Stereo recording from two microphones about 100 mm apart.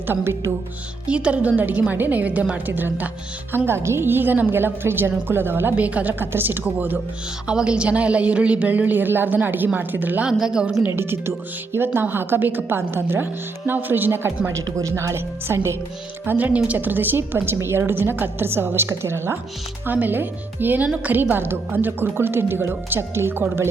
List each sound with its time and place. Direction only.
0.1 s a woman's voice: 25° right (ahead or behind)
1.0 s a woman's voice: 10° right (ahead or behind)
10.8 s a woman's voice: 20° right (ahead or behind)